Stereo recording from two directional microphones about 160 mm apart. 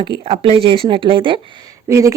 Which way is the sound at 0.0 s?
30° right (ahead or behind).